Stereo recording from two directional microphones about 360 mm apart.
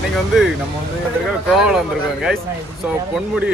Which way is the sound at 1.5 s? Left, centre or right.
Centre.